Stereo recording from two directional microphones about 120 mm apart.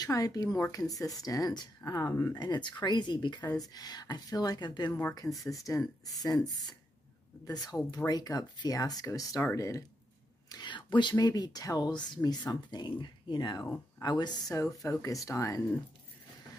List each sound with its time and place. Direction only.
0.0 s speech: 30° left (ahead or behind)
2.3 s speech: 35° left (ahead or behind)
10.5 s speech: 40° left (ahead or behind)